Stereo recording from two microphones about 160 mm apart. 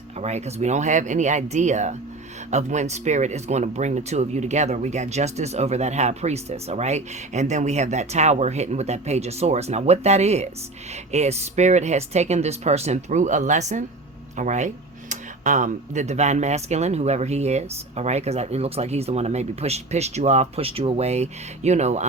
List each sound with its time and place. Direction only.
0.2 s speech: 45° right (ahead or behind)